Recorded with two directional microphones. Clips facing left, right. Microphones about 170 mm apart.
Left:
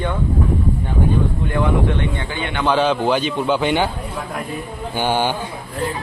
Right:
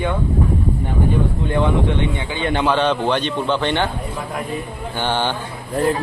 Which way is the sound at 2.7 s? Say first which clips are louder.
Left 3 dB; 5° left (ahead or behind).